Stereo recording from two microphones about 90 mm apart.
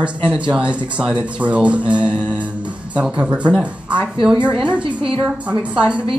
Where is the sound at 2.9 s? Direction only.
10° right (ahead or behind).